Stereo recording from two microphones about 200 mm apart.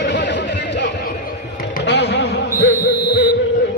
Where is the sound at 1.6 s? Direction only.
55° left (ahead or behind).